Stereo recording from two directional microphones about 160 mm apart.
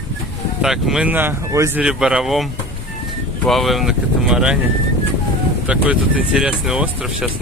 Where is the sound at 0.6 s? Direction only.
Centre (ahead or behind).